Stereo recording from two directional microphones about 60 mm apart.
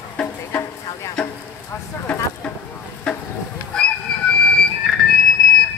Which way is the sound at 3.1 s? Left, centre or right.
Centre.